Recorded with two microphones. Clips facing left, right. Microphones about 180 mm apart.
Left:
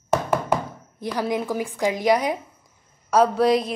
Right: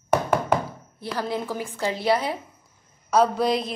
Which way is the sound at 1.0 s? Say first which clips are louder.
Left 3 dB; 15° left (ahead or behind).